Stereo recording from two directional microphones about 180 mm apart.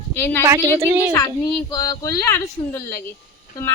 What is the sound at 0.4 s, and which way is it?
Speech, 15° right (ahead or behind).